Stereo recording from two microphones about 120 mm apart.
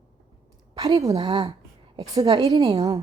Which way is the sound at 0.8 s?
30° right (ahead or behind).